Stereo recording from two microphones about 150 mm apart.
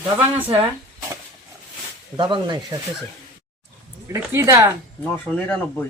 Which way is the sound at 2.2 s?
30° right (ahead or behind).